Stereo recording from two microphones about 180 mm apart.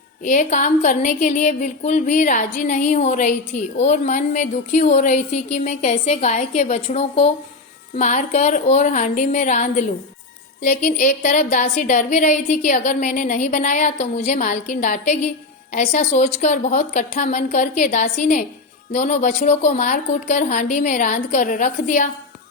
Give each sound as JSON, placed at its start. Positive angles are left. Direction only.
{"t": 0.3, "sound": "a woman's voice", "side_deg": 45}